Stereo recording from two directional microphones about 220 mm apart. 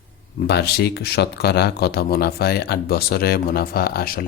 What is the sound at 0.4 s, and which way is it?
Speech, 50° left (ahead or behind).